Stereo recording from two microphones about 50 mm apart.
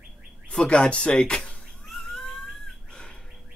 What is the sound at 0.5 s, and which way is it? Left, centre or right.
Speech, left.